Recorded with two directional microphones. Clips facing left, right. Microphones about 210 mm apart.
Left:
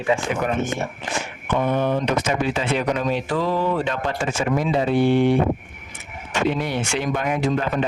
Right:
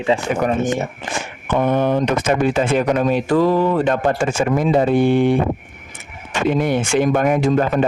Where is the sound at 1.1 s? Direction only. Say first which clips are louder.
Right 4 dB; 50° right (ahead or behind).